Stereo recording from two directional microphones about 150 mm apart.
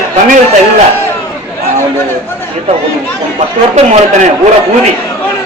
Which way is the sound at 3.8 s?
50° right (ahead or behind).